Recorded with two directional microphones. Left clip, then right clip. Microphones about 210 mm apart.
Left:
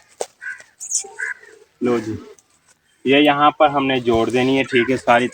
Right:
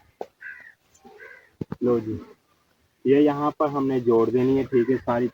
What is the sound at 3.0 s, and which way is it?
Speech, 35° left (ahead or behind).